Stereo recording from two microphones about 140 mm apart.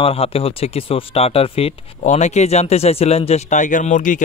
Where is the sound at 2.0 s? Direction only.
55° left (ahead or behind).